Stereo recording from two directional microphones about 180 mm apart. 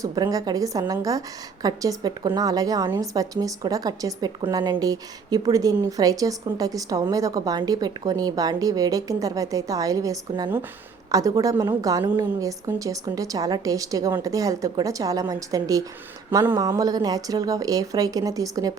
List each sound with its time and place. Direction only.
0.0 s a woman's voice: 20° right (ahead or behind)